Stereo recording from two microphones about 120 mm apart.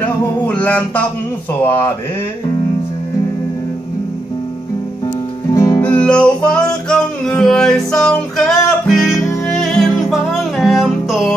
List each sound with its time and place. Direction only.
0.0 s music: 15° left (ahead or behind)
5.5 s music: 30° left (ahead or behind)
5.8 s music: 10° left (ahead or behind)